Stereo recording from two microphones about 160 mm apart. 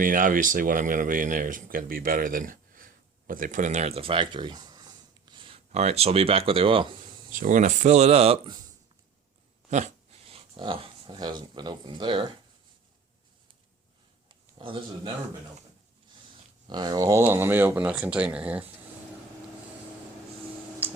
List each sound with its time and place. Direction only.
0.0 s speech: 60° right (ahead or behind); by 6.9 s 35° right (ahead or behind)
7.3 s speech: 55° right (ahead or behind); by 8.6 s 35° right (ahead or behind)
9.6 s speech: 45° right (ahead or behind)
10.3 s speech: 35° right (ahead or behind)
14.6 s speech: 30° right (ahead or behind)
16.6 s speech: 25° right (ahead or behind); by 18.6 s 10° right (ahead or behind)
20.8 s tick-tock: 10° right (ahead or behind)